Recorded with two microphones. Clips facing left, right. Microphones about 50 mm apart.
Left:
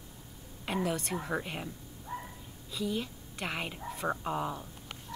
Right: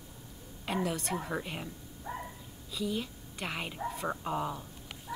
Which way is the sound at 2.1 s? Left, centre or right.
Right.